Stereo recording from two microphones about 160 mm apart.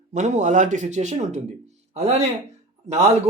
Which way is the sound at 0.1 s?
45° right (ahead or behind).